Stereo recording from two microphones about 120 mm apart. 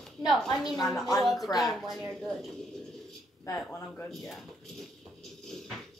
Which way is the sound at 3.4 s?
20° left (ahead or behind).